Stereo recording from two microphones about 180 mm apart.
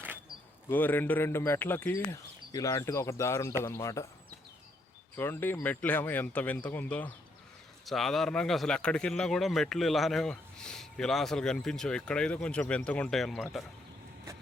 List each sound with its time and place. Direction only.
0.7 s speech: 10° left (ahead or behind)
5.1 s speech: 10° left (ahead or behind)